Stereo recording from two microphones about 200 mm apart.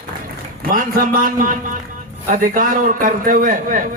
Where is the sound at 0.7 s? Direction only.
45° right (ahead or behind).